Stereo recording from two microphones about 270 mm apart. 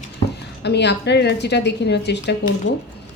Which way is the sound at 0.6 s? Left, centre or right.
Left.